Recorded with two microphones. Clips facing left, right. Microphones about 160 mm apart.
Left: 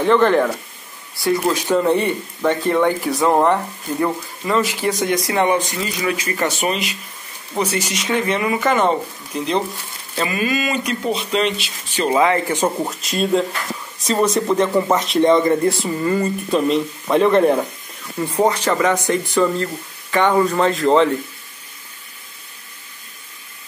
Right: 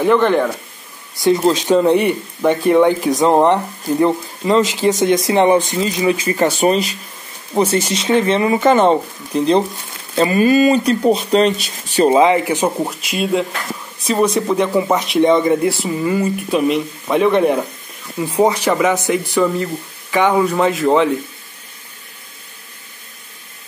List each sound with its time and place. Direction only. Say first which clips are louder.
0.0 s speech: right 1 dB; 5° right (ahead or behind)
1.1 s speech: right 5 dB; 20° right (ahead or behind); by 7.0 s 35° right (ahead or behind)
7.5 s speech: right 6 dB; 25° right (ahead or behind); by 11.7 s 40° right (ahead or behind)
12.1 s speech: right 2 dB; 20° right (ahead or behind)